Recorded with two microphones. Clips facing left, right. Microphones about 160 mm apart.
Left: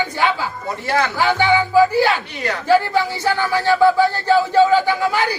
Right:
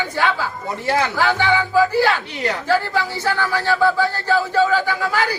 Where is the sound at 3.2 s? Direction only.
15° left (ahead or behind).